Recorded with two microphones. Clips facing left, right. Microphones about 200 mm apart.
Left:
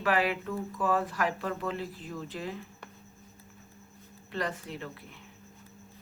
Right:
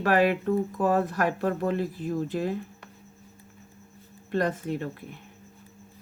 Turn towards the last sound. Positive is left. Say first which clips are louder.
# right 9 dB
turn(degrees=-50)  # may be behind; listen again after turning